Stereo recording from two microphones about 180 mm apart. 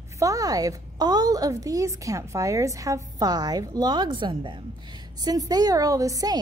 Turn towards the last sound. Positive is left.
turn(degrees=-20)  # may be behind; listen again after turning